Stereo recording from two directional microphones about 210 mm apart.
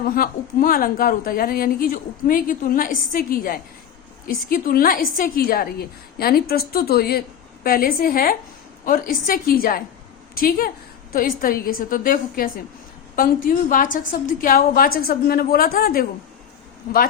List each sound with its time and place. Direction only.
0.0 s a woman's voice: 40° left (ahead or behind)